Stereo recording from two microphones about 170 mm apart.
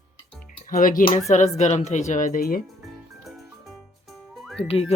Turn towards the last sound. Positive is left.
turn(degrees=35)  # may be behind; listen again after turning